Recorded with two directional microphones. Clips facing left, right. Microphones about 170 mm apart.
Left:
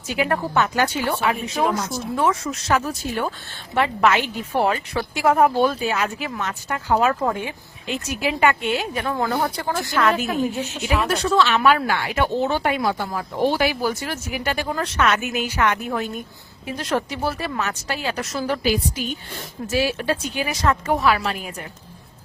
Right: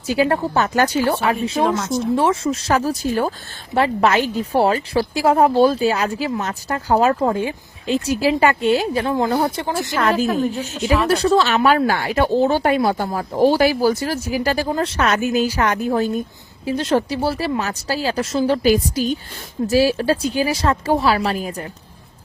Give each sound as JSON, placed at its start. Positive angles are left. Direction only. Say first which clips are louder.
{"t": 0.1, "sound": "speech", "louder": "right 4 dB", "side_deg": -35}
{"t": 10.2, "sound": "speech", "louder": "right 3 dB", "side_deg": 5}
{"t": 11.1, "sound": "speech", "louder": "right 2 dB", "side_deg": -35}
{"t": 18.6, "sound": "speech", "louder": "right 6 dB", "side_deg": -40}